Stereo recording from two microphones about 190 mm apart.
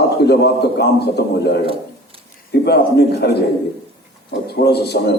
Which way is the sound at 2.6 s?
60° left (ahead or behind).